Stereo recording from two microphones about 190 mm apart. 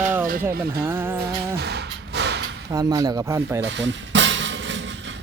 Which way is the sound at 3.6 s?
70° right (ahead or behind).